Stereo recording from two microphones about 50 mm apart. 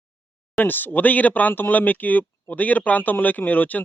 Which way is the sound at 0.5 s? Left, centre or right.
Left.